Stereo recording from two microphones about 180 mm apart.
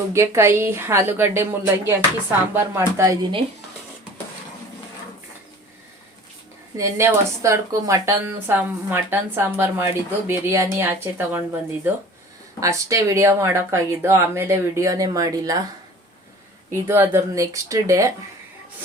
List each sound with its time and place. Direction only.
0.1 s speech: 15° right (ahead or behind)
6.7 s speech: 15° right (ahead or behind)
12.5 s speech: 15° right (ahead or behind)
16.7 s speech: 15° right (ahead or behind)